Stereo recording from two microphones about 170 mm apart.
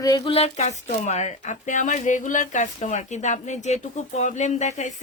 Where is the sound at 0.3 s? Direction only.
35° left (ahead or behind).